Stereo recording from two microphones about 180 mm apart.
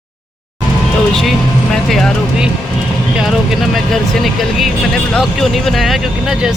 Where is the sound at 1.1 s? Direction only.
Centre (ahead or behind).